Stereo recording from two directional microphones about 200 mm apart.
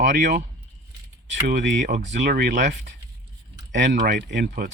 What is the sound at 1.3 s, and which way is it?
Speech, 60° right (ahead or behind).